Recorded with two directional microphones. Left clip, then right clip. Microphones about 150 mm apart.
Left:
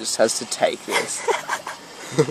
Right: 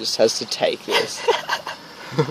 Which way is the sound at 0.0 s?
25° right (ahead or behind).